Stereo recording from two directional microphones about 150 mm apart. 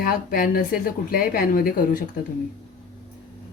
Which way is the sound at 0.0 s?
70° left (ahead or behind).